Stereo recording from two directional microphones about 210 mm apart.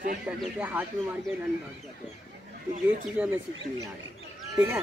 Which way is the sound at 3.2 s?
10° right (ahead or behind).